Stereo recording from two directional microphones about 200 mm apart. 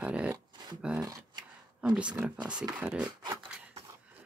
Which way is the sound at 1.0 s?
20° right (ahead or behind).